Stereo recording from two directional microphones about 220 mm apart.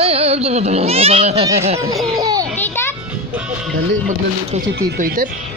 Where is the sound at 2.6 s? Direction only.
10° left (ahead or behind).